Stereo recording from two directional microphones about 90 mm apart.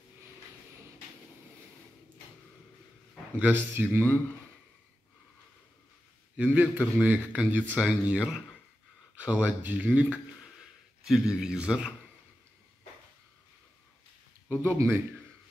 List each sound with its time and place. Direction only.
3.3 s speech: 20° right (ahead or behind)
6.3 s speech: 15° right (ahead or behind)
11.1 s speech: 5° right (ahead or behind)
14.5 s speech: 30° right (ahead or behind)